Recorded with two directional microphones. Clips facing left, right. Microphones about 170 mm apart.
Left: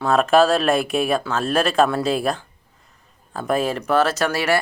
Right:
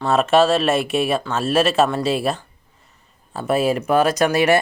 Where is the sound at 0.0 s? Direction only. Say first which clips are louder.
Even; centre (ahead or behind).